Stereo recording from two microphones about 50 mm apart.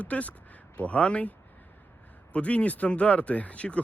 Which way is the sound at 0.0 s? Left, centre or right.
Left.